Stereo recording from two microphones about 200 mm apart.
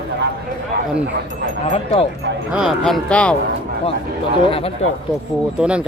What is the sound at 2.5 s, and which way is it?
Speech, centre (ahead or behind).